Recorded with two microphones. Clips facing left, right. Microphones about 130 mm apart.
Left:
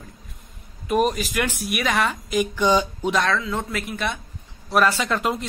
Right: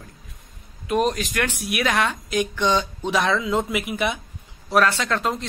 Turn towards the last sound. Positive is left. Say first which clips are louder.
# left 1 dB
turn(degrees=5)  # may be behind; listen again after turning